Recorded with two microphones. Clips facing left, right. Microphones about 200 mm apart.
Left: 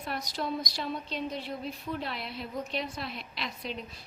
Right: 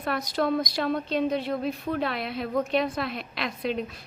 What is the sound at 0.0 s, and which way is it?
A woman's voice, 60° right (ahead or behind).